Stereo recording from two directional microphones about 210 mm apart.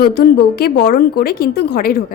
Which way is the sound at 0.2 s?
50° left (ahead or behind).